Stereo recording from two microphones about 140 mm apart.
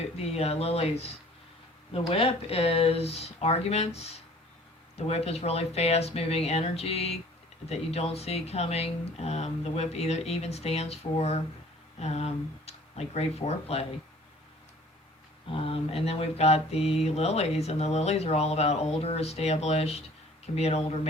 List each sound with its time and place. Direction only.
0.2 s mantra: 45° left (ahead or behind)
11.9 s speech: 50° left (ahead or behind)
15.4 s mantra: 40° left (ahead or behind)